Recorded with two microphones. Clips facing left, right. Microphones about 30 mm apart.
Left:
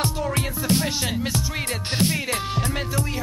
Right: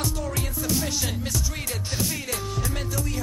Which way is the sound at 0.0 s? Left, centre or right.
Left.